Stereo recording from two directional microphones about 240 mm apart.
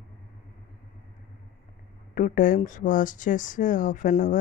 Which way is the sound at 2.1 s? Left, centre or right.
Left.